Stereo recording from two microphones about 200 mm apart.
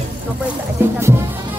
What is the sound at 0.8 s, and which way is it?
Music, 10° right (ahead or behind).